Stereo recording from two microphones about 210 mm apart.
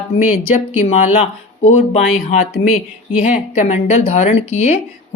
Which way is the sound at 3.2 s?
35° left (ahead or behind).